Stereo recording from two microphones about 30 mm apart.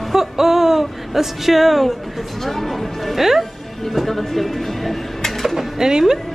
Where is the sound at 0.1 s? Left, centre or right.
Centre.